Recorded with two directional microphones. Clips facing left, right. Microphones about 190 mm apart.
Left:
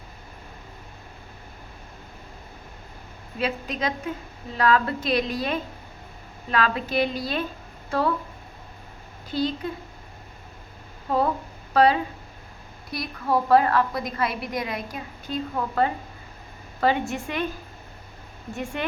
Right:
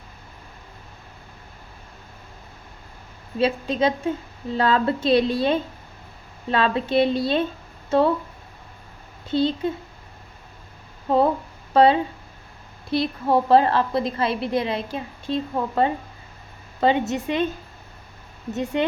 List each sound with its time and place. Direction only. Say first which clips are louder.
3.3 s a woman's voice: right 6 dB; 30° right (ahead or behind)
9.3 s a woman's voice: right 5 dB; 25° right (ahead or behind)
11.7 s a woman's voice: right 3 dB; 25° right (ahead or behind)
18.5 s a woman's voice: right 7 dB; 20° right (ahead or behind)